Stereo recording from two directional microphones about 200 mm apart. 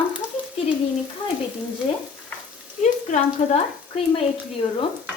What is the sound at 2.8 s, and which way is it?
Speech, 35° left (ahead or behind).